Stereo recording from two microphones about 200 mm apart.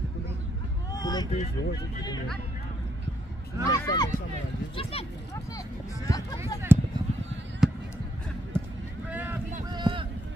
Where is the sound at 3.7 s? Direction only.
20° left (ahead or behind).